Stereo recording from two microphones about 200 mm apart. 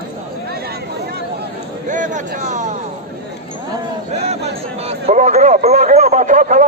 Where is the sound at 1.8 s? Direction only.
40° right (ahead or behind).